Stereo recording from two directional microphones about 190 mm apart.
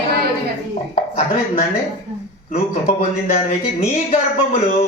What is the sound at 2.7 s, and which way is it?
Speech, 35° left (ahead or behind).